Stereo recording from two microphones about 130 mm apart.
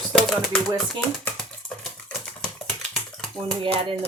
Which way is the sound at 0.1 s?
5° left (ahead or behind).